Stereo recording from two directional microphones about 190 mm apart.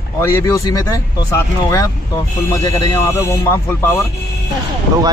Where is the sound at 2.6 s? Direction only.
20° left (ahead or behind).